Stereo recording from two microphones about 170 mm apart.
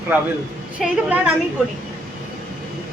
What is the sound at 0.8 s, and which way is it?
Speech, 5° right (ahead or behind).